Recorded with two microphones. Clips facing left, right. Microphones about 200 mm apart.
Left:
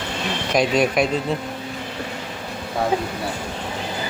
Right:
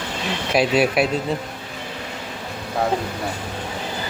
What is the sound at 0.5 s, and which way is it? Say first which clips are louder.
Speech: right 1 dB; 5° right (ahead or behind).